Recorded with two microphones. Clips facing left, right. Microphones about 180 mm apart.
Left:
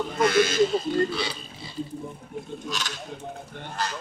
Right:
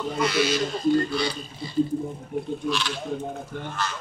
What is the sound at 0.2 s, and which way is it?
Speech, 50° left (ahead or behind).